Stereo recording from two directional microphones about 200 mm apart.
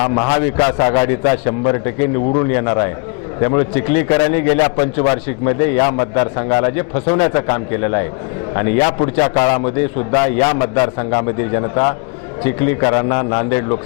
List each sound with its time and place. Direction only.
0.0 s a man's voice: 25° left (ahead or behind)